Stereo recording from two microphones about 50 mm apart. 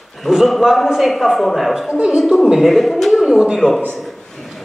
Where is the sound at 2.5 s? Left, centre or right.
Centre.